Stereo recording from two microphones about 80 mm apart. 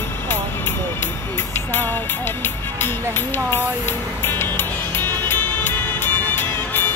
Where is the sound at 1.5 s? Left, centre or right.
Left.